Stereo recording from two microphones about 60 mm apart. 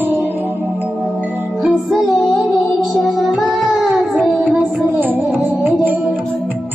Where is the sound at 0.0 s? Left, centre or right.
Right.